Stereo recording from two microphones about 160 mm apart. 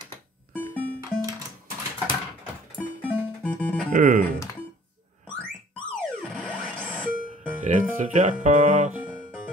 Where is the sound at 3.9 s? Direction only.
60° right (ahead or behind).